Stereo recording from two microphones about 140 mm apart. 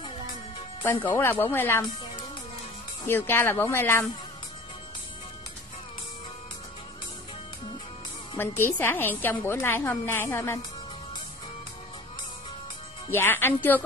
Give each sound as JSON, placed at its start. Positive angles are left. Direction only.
{"t": 0.8, "sound": "a woman's voice", "side_deg": 15}
{"t": 3.1, "sound": "a woman's voice", "side_deg": 15}
{"t": 8.4, "sound": "a woman's voice", "side_deg": 15}
{"t": 13.1, "sound": "a woman's voice", "side_deg": 15}